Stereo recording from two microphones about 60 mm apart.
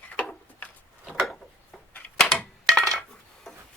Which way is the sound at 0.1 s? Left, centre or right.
Left.